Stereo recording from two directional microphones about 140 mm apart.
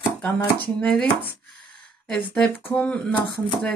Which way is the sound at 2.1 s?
10° left (ahead or behind).